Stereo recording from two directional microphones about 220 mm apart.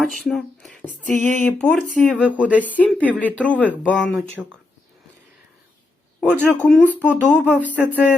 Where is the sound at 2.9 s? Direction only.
5° right (ahead or behind).